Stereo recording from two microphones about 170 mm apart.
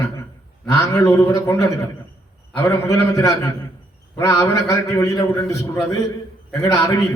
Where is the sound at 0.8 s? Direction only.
15° left (ahead or behind).